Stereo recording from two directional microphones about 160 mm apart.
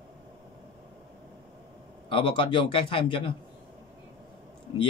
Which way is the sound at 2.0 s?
35° left (ahead or behind).